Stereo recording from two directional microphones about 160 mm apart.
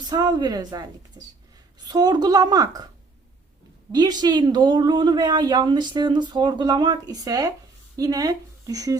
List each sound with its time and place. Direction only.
0.0 s speech: 25° right (ahead or behind)
3.9 s speech: 25° right (ahead or behind)